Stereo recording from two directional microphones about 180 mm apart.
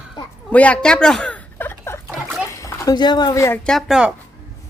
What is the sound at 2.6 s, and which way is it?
Speech, 15° left (ahead or behind).